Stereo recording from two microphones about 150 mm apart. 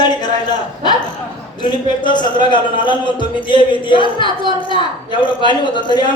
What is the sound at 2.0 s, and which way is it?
Speech, 30° left (ahead or behind).